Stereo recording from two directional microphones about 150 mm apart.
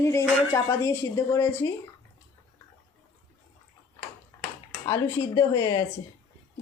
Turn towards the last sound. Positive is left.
turn(degrees=25)  # may be behind; listen again after turning